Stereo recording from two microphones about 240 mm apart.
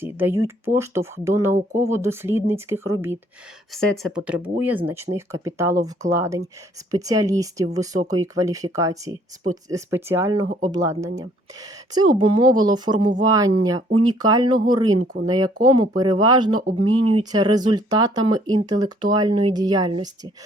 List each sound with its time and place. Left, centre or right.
0.0 s speech: centre
3.8 s speech: centre